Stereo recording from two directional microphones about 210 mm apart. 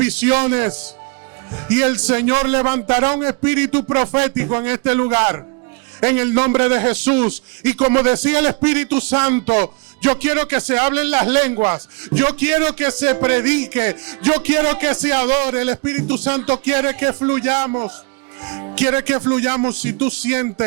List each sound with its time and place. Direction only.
0.0 s speech: 15° right (ahead or behind)